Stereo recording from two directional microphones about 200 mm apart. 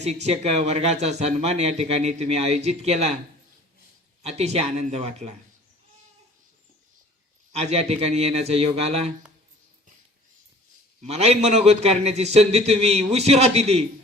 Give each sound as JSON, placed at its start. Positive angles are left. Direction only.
{"t": 0.0, "sound": "speech", "side_deg": -35}
{"t": 4.2, "sound": "speech", "side_deg": -30}
{"t": 7.5, "sound": "speech", "side_deg": -30}
{"t": 11.0, "sound": "speech", "side_deg": -35}